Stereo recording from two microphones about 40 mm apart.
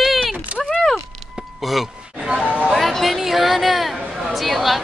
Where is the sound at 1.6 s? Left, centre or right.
Centre.